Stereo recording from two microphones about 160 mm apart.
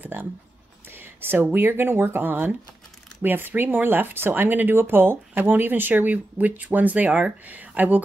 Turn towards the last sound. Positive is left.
turn(degrees=-10)  # may be behind; listen again after turning